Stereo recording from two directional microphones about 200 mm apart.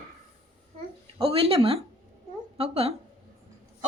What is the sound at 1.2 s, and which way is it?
A woman's voice, 30° right (ahead or behind).